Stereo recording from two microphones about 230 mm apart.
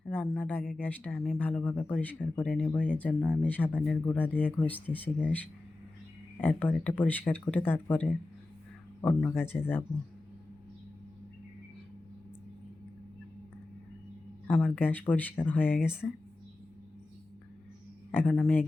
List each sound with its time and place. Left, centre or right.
0.0 s speech: centre
6.4 s speech: centre
14.4 s speech: centre
18.1 s speech: centre